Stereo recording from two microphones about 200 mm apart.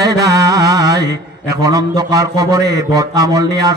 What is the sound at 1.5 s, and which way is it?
Speech, 15° right (ahead or behind).